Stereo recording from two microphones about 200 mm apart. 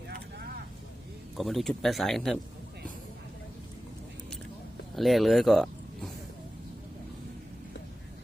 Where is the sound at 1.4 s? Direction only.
Centre (ahead or behind).